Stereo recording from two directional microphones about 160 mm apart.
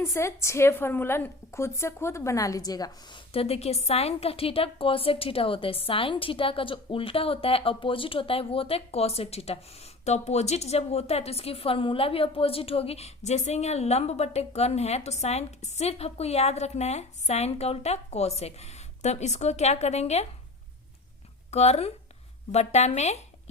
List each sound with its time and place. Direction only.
0.0 s a woman's voice: 15° left (ahead or behind); by 20.2 s 40° left (ahead or behind)
21.5 s a woman's voice: 40° left (ahead or behind)